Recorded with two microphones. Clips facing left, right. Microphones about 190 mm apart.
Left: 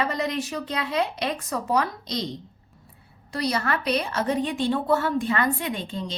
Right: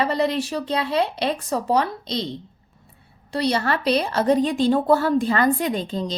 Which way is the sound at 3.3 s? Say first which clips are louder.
Right 4 dB; 30° right (ahead or behind).